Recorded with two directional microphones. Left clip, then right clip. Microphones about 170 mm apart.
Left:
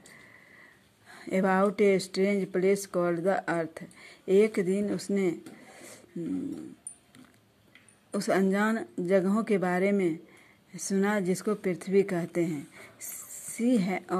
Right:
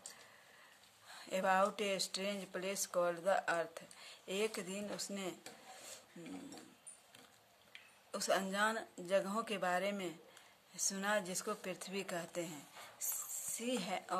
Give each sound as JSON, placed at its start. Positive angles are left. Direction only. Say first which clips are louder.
{"t": 1.0, "sound": "speech", "louder": "left 8 dB", "side_deg": 30}
{"t": 8.1, "sound": "speech", "louder": "left 10 dB", "side_deg": 30}
{"t": 13.0, "sound": "mouse", "louder": "even", "side_deg": 30}